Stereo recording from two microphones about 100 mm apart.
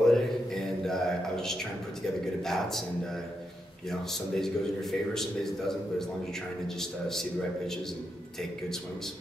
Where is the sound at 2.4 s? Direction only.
5° left (ahead or behind).